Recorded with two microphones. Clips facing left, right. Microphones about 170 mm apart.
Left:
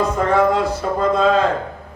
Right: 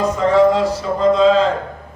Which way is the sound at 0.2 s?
55° left (ahead or behind).